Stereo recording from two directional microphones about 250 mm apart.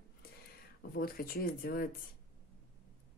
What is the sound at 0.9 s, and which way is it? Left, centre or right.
Speech, left.